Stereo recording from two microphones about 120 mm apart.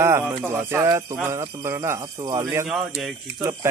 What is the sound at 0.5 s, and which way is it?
Speech, 20° right (ahead or behind).